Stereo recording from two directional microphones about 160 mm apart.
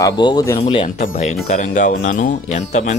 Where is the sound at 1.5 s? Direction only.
50° left (ahead or behind).